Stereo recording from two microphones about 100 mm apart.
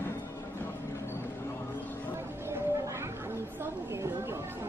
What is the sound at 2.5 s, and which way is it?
Cat, 25° right (ahead or behind).